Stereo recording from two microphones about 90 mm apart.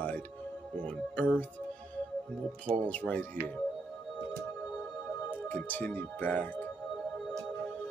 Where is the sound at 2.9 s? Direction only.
15° left (ahead or behind).